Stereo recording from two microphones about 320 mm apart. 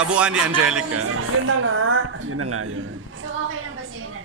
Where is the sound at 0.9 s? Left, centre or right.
Right.